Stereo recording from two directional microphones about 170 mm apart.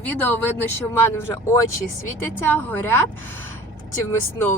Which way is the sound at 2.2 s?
10° left (ahead or behind).